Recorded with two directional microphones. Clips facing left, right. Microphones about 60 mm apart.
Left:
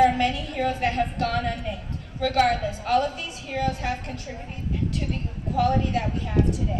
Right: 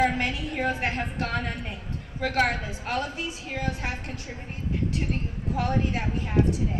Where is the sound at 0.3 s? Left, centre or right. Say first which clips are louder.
Left 2 dB; centre.